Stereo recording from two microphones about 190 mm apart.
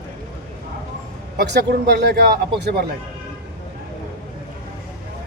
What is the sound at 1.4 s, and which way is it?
Speech, 60° right (ahead or behind).